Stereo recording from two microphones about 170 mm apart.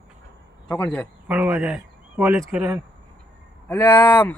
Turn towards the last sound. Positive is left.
turn(degrees=10)  # may be behind; listen again after turning